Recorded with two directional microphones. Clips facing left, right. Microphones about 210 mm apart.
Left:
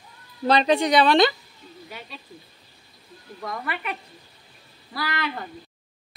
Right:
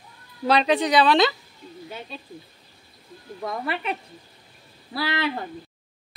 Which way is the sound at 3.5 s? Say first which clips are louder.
Right 3 dB; 25° right (ahead or behind).